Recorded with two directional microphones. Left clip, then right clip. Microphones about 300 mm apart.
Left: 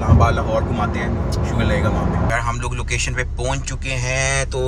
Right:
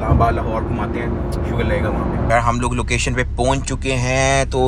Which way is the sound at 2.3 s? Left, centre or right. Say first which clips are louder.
Right 6 dB; centre.